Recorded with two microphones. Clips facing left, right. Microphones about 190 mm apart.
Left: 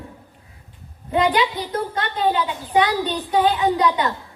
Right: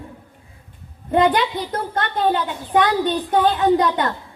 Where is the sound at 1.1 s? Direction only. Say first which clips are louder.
Right 2 dB; 50° right (ahead or behind).